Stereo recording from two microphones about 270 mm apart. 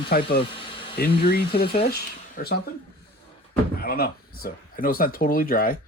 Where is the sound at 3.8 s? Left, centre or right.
Left.